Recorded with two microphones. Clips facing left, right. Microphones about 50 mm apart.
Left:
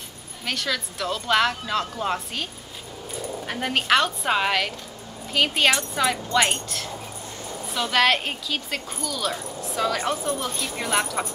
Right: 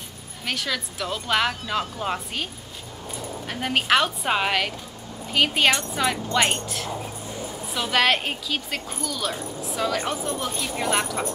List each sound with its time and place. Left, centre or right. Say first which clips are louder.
0.5 s speech: left 1 dB; centre
3.4 s speech: even; centre